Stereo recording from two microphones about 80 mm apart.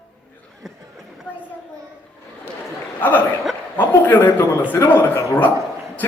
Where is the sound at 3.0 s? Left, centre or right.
Left.